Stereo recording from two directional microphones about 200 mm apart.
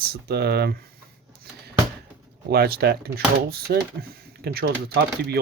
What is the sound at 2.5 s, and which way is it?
Speech, 50° right (ahead or behind).